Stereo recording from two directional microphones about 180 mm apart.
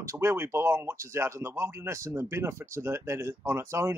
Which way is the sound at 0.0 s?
15° right (ahead or behind).